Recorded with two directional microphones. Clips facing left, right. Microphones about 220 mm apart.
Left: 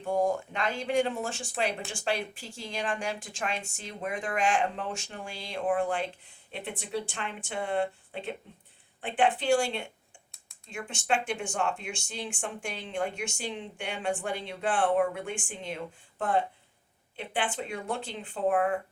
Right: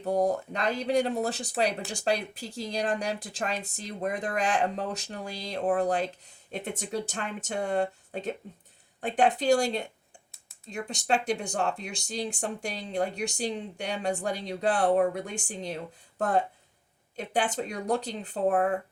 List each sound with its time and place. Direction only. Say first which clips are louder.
0.0 s speech: right 2 dB; 40° right (ahead or behind)